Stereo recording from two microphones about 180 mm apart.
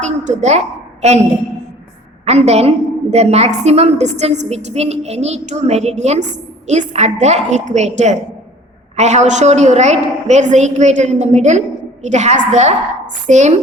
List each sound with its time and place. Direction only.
0.0 s a woman's voice: 40° right (ahead or behind)
2.2 s a woman's voice: 35° right (ahead or behind)